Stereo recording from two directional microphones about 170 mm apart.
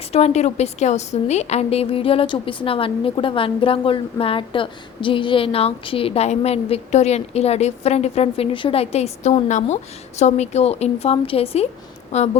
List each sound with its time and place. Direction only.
0.1 s a woman's voice: 40° left (ahead or behind)